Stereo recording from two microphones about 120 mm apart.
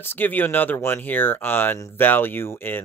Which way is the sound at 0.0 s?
15° left (ahead or behind).